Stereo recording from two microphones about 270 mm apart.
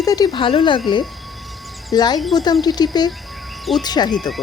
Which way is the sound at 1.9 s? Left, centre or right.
Centre.